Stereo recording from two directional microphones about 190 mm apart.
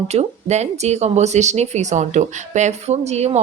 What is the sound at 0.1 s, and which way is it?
Speech, 35° right (ahead or behind).